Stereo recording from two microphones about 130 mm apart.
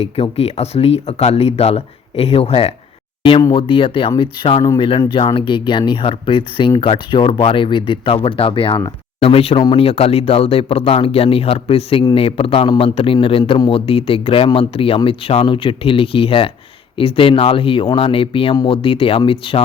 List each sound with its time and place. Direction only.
0.0 s speech: 50° left (ahead or behind)